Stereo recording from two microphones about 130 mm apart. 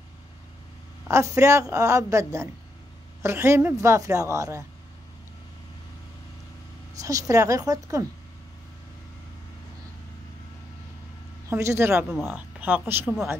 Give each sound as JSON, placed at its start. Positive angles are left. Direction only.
{"t": 1.0, "sound": "speech", "side_deg": -20}
{"t": 7.0, "sound": "speech", "side_deg": -25}
{"t": 11.4, "sound": "speech", "side_deg": -20}
{"t": 11.9, "sound": "speech", "side_deg": -10}
{"t": 13.0, "sound": "speech", "side_deg": 0}